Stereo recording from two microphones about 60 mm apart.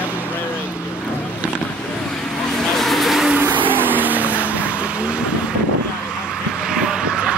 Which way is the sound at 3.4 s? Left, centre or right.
Right.